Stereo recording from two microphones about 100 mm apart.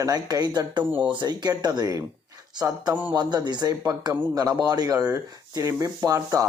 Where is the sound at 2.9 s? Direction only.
20° right (ahead or behind).